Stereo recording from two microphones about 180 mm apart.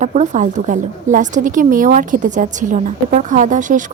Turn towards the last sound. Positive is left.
turn(degrees=-45)  # may be behind; listen again after turning